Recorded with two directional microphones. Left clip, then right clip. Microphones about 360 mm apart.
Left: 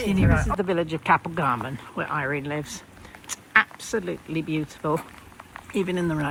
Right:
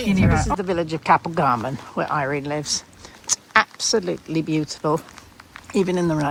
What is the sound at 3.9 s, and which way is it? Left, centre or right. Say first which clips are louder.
Speech: right 6 dB; centre.